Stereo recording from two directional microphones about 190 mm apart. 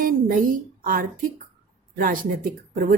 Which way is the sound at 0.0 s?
50° right (ahead or behind).